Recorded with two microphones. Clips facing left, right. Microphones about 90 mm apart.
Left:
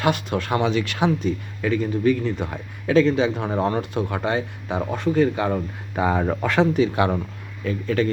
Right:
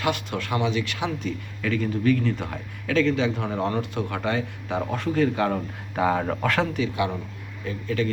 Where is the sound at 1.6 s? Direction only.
20° left (ahead or behind).